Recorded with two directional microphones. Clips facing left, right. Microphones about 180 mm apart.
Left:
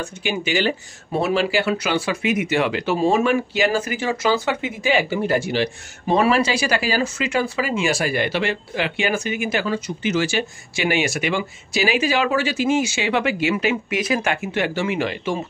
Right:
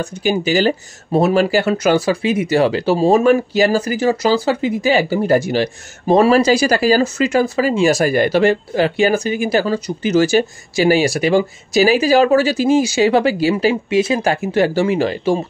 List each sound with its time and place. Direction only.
0.0 s speech: 40° right (ahead or behind)